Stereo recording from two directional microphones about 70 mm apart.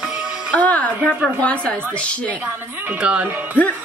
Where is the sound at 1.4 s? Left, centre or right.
Centre.